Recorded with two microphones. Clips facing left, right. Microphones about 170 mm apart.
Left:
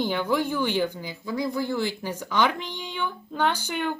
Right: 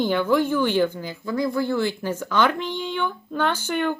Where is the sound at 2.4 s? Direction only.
55° right (ahead or behind).